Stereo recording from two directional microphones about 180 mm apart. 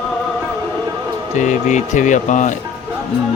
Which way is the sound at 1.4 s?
40° left (ahead or behind).